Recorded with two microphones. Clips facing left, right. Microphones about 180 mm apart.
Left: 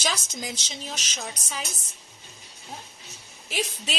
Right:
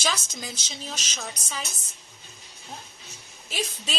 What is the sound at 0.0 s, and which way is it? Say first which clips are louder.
A woman's voice: even; 15° left (ahead or behind).